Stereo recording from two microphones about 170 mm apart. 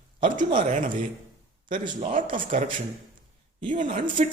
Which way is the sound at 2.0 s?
50° right (ahead or behind).